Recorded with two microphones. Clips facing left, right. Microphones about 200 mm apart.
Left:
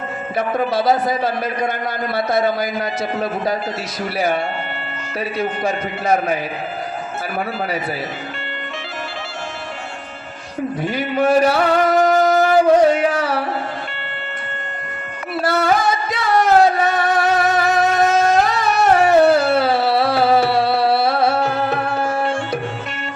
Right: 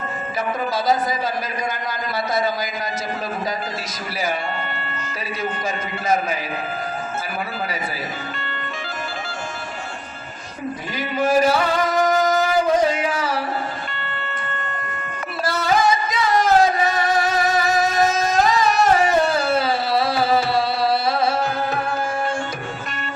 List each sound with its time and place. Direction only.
0.3 s a man's voice: 60° left (ahead or behind)
5.4 s a man's voice: 60° left (ahead or behind)
10.9 s music: 60° left (ahead or behind)
15.4 s music: 60° left (ahead or behind)